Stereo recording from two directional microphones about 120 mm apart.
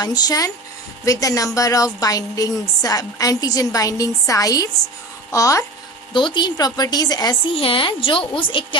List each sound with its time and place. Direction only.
0.0 s a woman's voice: 35° left (ahead or behind)
6.1 s a woman's voice: 40° left (ahead or behind)
7.5 s a woman's voice: 50° left (ahead or behind)